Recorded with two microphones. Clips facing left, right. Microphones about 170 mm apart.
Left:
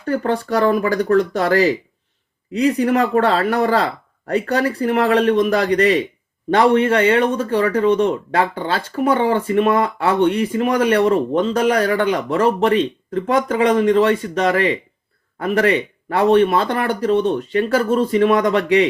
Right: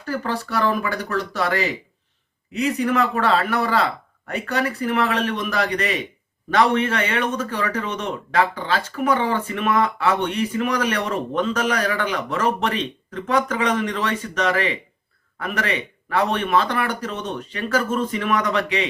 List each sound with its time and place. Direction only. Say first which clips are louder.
0.1 s speech: left 6 dB; 30° left (ahead or behind)